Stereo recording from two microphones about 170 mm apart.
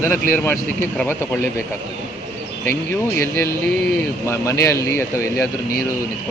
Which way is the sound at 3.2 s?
15° left (ahead or behind).